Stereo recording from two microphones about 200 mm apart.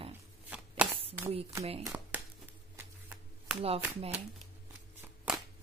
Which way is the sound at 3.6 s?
30° right (ahead or behind).